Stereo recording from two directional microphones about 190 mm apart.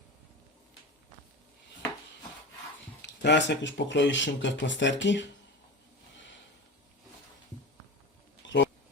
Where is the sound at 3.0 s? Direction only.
65° left (ahead or behind).